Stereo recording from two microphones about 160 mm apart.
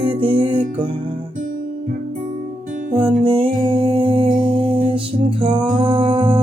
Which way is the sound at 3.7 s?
35° right (ahead or behind).